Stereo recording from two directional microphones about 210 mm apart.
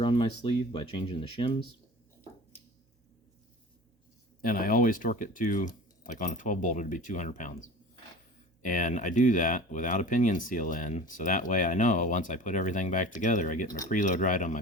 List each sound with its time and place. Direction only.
0.0 s speech: 25° left (ahead or behind)
4.4 s speech: 40° left (ahead or behind)
8.6 s speech: 35° left (ahead or behind)